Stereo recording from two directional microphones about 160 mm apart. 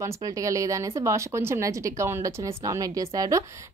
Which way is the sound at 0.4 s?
20° right (ahead or behind).